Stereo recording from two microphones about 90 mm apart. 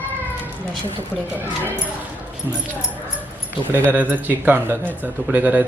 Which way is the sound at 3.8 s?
20° right (ahead or behind).